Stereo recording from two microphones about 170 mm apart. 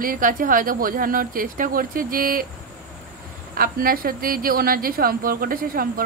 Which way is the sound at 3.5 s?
60° right (ahead or behind).